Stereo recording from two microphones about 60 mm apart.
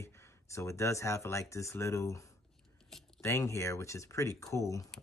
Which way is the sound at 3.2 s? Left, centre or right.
Left.